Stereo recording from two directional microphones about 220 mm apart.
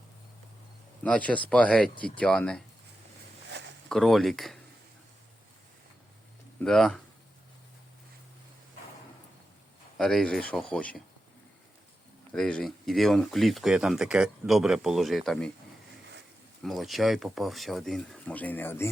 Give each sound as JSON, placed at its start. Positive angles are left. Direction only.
{"t": 1.0, "sound": "speech", "side_deg": 5}
{"t": 3.5, "sound": "a sound", "side_deg": -50}
{"t": 3.8, "sound": "speech", "side_deg": 0}
{"t": 6.6, "sound": "speech", "side_deg": 0}
{"t": 10.0, "sound": "speech", "side_deg": 0}
{"t": 12.3, "sound": "speech", "side_deg": 5}
{"t": 16.6, "sound": "speech", "side_deg": 0}